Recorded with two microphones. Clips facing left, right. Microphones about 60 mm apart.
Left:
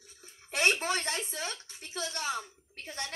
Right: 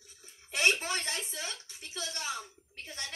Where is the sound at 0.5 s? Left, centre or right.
Left.